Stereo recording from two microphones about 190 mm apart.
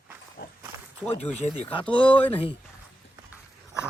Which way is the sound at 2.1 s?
10° left (ahead or behind).